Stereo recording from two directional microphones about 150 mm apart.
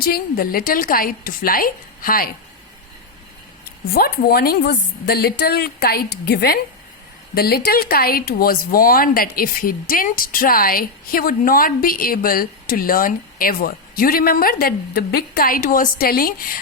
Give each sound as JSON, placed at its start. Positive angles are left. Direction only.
{"t": 0.0, "sound": "speech", "side_deg": 85}
{"t": 3.9, "sound": "a woman's voice", "side_deg": 90}